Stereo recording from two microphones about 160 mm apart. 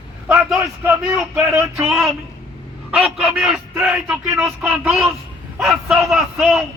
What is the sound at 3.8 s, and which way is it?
Speech, 15° right (ahead or behind).